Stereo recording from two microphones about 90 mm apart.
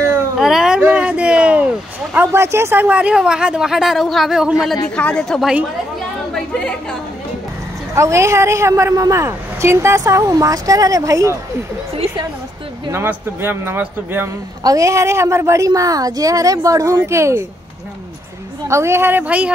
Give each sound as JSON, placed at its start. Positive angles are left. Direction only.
{"t": 0.4, "sound": "a sound", "side_deg": -5}
{"t": 0.7, "sound": "a sound", "side_deg": -15}
{"t": 2.3, "sound": "speech", "side_deg": -30}
{"t": 4.8, "sound": "a woman's voice", "side_deg": 10}
{"t": 7.9, "sound": "speech", "side_deg": -30}
{"t": 12.9, "sound": "speech", "side_deg": -25}
{"t": 14.6, "sound": "speech", "side_deg": -40}
{"t": 18.7, "sound": "speech", "side_deg": -30}